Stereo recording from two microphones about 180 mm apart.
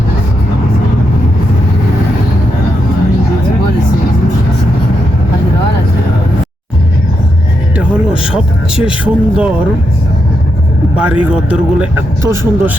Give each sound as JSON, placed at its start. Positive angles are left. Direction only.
{"t": 7.8, "sound": "vehicle", "side_deg": -5}
{"t": 10.9, "sound": "speech", "side_deg": -5}